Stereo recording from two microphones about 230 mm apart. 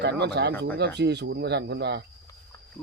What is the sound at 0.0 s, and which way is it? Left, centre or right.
Speech, right.